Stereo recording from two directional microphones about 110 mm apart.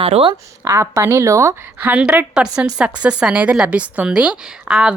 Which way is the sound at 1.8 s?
15° right (ahead or behind).